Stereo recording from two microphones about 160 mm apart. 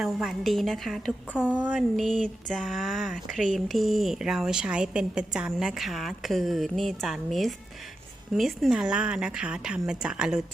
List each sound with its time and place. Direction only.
0.0 s a woman's voice: centre (ahead or behind)
2.0 s a sound: 55° right (ahead or behind)
2.5 s a woman's voice: centre (ahead or behind)